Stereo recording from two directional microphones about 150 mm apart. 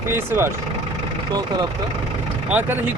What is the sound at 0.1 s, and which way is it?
Speech, 15° right (ahead or behind).